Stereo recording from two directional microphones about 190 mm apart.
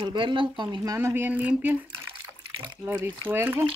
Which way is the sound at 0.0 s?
25° right (ahead or behind).